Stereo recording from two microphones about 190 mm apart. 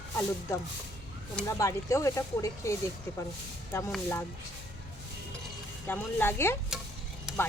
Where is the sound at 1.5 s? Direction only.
15° left (ahead or behind).